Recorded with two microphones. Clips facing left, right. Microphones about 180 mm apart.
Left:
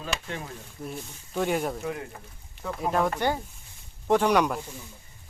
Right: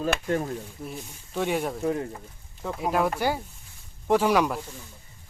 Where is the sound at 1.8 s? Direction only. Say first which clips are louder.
Right 6 dB; 30° right (ahead or behind).